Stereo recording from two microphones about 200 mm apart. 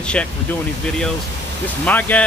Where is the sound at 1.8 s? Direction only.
10° left (ahead or behind).